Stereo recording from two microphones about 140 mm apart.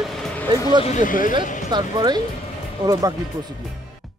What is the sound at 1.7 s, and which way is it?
Speech, 30° right (ahead or behind).